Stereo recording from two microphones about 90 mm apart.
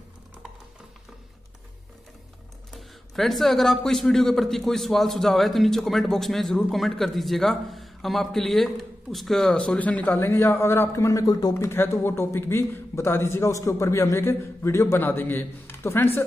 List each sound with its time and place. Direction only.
2.7 s a man's voice: centre (ahead or behind); by 11.5 s 40° left (ahead or behind)
11.5 s a man's voice: 30° left (ahead or behind)